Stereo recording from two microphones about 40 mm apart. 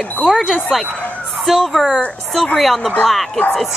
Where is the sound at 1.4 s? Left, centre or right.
Centre.